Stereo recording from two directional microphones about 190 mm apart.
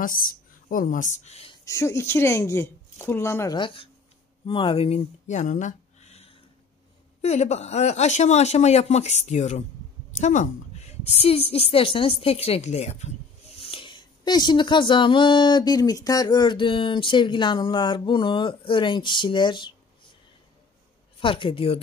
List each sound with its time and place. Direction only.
0.0 s speech: 45° left (ahead or behind)
1.6 s a woman's voice: 15° left (ahead or behind)
3.5 s a woman's voice: 25° left (ahead or behind)
21.2 s speech: 25° left (ahead or behind)